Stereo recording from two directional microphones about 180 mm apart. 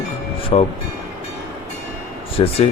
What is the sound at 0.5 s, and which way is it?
Speech, 30° left (ahead or behind).